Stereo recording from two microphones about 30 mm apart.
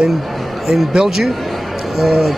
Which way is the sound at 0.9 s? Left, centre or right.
Right.